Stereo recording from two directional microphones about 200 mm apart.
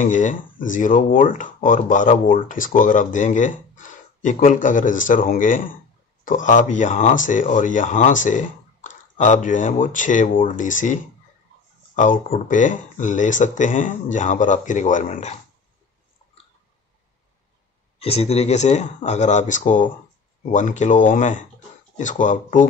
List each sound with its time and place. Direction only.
0.0 s speech: 40° left (ahead or behind)
17.9 s speech: 30° left (ahead or behind)